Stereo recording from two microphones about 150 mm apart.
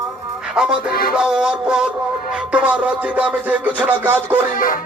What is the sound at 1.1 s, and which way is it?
Music, 5° right (ahead or behind).